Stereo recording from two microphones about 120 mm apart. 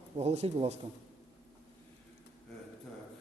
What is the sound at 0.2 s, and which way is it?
Speech, 60° right (ahead or behind).